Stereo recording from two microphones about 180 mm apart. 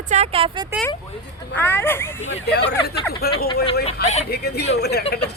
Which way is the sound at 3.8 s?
40° left (ahead or behind).